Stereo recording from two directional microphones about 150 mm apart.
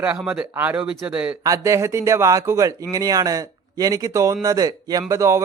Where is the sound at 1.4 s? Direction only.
20° right (ahead or behind).